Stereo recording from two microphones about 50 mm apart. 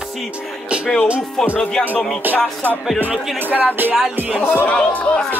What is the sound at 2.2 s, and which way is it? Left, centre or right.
Music, right.